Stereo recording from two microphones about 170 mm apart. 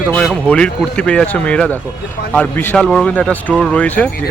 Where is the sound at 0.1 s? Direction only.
5° left (ahead or behind).